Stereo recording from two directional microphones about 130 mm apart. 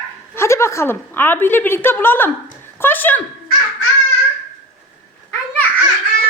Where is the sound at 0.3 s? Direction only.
20° left (ahead or behind).